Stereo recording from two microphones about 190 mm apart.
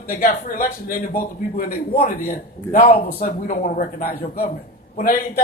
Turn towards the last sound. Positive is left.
turn(degrees=50)  # may be behind; listen again after turning